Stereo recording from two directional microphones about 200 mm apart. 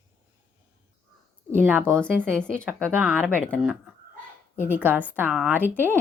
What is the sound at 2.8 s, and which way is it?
A woman's voice, 10° right (ahead or behind).